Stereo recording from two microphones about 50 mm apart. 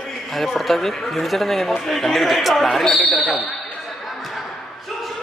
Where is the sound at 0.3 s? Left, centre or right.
Centre.